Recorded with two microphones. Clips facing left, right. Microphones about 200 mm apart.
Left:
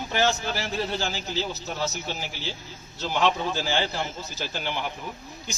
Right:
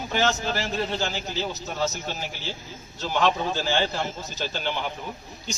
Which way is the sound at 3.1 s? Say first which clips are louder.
Right 1 dB; 10° left (ahead or behind).